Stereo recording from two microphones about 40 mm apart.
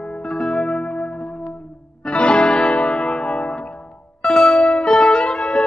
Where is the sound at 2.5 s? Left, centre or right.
Centre.